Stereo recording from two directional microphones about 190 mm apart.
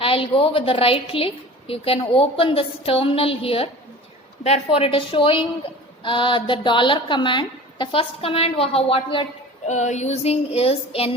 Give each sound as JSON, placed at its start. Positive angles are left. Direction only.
{"t": 0.0, "sound": "a woman's voice", "side_deg": 30}
{"t": 9.6, "sound": "child singing", "side_deg": 40}